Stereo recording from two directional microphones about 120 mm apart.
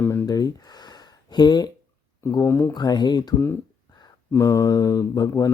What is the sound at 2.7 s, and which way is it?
Speech, 35° left (ahead or behind).